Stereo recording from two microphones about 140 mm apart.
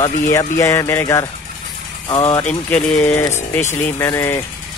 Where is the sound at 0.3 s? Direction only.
20° left (ahead or behind).